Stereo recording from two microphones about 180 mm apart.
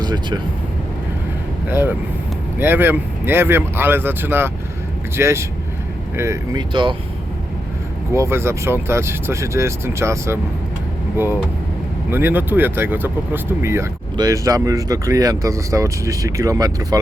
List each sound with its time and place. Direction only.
0.0 s speech: 25° right (ahead or behind)
1.7 s speech: 10° right (ahead or behind)
8.1 s speech: 15° right (ahead or behind)
12.1 s speech: 10° right (ahead or behind)